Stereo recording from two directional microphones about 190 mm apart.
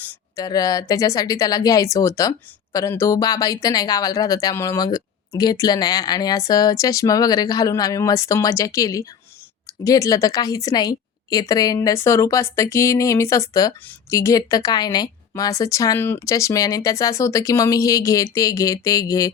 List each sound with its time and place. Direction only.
0.0 s a woman's voice: 20° left (ahead or behind)